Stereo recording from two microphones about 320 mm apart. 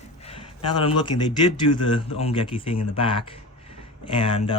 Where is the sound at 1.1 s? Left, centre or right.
Left.